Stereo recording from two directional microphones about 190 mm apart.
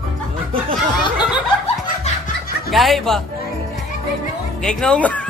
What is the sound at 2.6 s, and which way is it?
Speech, centre (ahead or behind).